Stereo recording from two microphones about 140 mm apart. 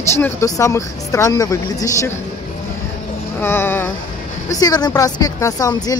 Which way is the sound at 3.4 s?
15° left (ahead or behind).